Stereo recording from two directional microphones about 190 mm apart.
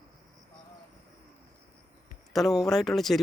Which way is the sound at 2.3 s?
Centre (ahead or behind).